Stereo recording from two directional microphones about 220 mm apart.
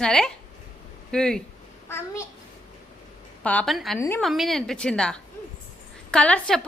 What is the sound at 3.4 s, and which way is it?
Speech, 5° left (ahead or behind).